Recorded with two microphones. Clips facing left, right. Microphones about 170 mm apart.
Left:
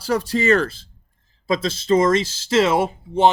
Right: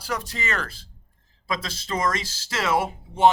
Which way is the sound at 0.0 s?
35° left (ahead or behind).